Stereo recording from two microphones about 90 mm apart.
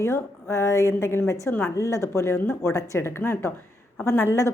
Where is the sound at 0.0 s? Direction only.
30° left (ahead or behind).